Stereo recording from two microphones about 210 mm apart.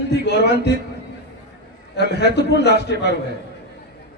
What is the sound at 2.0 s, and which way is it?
A man's voice, 55° left (ahead or behind).